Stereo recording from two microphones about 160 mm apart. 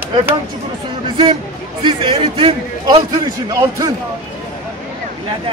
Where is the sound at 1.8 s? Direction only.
30° right (ahead or behind).